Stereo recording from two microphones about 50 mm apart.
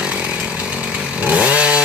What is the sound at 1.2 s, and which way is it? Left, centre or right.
Chainsaw, right.